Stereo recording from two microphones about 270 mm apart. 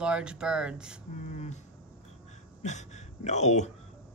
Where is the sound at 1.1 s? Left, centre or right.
Left.